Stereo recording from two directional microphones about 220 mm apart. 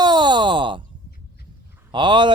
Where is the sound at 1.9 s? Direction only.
20° right (ahead or behind).